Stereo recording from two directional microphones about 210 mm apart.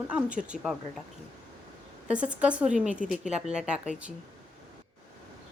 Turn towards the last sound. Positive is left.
turn(degrees=-5)  # may be behind; listen again after turning